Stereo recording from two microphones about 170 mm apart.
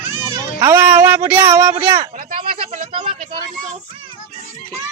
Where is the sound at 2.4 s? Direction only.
35° right (ahead or behind).